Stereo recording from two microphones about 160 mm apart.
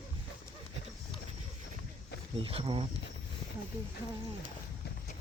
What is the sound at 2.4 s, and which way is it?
Speech, 35° right (ahead or behind).